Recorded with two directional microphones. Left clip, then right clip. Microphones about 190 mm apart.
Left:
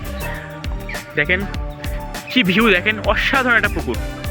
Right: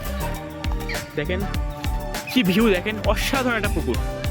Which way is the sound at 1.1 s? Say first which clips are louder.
Left 11 dB; 5° left (ahead or behind).